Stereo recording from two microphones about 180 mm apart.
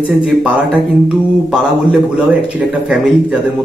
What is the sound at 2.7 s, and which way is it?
Speech, 5° right (ahead or behind).